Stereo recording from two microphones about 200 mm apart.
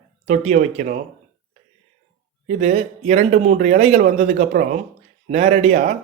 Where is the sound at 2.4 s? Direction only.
35° right (ahead or behind).